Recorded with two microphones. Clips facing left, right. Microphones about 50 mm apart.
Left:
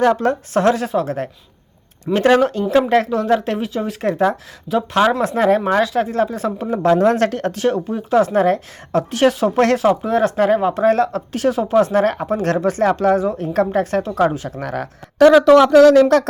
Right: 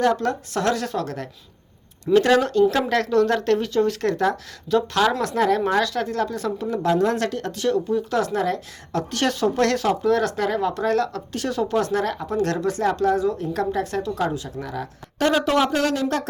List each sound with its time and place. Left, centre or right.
0.0 s a woman's voice: left
12.0 s a woman's voice: left
14.6 s speech: left